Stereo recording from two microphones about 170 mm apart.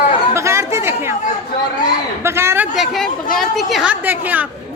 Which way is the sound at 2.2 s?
15° right (ahead or behind).